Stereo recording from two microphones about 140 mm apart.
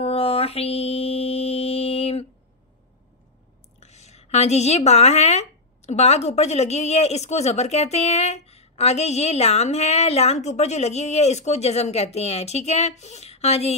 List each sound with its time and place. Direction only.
0.0 s mantra: 45° left (ahead or behind)
3.8 s a woman's voice: 50° left (ahead or behind)